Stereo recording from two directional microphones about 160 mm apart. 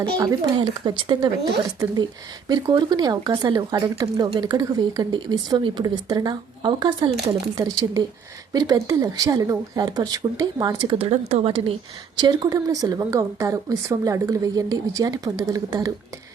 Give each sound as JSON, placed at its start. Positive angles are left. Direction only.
{"t": 0.2, "sound": "speech", "side_deg": -20}
{"t": 2.5, "sound": "speech", "side_deg": -25}
{"t": 12.1, "sound": "speech", "side_deg": -25}